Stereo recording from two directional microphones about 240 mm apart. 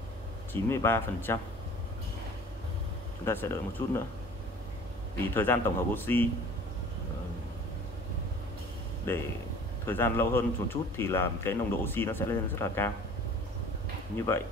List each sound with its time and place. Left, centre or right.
0.5 s speech: centre
3.3 s speech: centre
5.3 s speech: centre
9.1 s speech: centre
14.1 s speech: centre